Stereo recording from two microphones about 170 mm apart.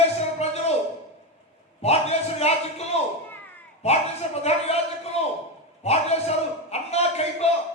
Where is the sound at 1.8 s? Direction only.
40° left (ahead or behind).